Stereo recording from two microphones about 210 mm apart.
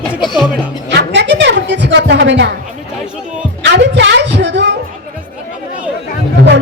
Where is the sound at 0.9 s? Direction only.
55° right (ahead or behind).